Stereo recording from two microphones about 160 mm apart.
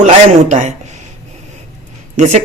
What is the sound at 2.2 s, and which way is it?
Speech, 50° right (ahead or behind).